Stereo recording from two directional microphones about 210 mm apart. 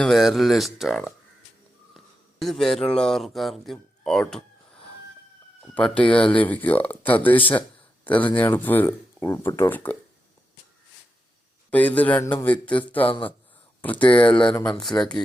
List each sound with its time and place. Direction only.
0.0 s speech: centre (ahead or behind)
2.4 s speech: centre (ahead or behind)
5.7 s speech: 5° left (ahead or behind)
11.7 s speech: 5° left (ahead or behind)
13.1 s speech: 25° left (ahead or behind)
13.8 s speech: 5° left (ahead or behind)